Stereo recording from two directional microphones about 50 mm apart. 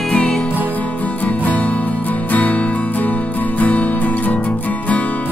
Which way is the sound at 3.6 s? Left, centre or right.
Left.